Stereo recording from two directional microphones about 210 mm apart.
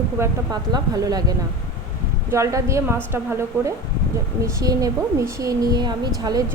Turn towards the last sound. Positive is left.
turn(degrees=-20)  # may be behind; listen again after turning